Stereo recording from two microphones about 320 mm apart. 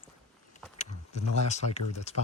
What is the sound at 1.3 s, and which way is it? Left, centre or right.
Speech, left.